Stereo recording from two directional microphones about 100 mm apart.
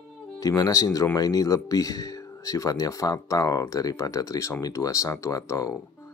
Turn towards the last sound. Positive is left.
turn(degrees=35)  # may be behind; listen again after turning